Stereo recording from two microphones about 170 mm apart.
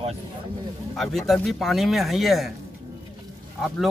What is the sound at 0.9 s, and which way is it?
Speech, centre (ahead or behind).